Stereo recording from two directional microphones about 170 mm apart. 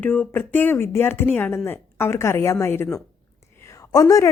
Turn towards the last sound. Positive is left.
turn(degrees=20)  # may be behind; listen again after turning